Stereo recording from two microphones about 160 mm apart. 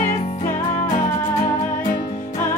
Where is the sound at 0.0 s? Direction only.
55° left (ahead or behind).